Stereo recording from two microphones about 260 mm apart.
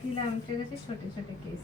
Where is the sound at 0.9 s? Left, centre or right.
Left.